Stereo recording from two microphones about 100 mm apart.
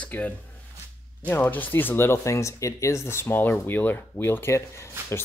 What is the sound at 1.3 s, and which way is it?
Speech, 20° left (ahead or behind).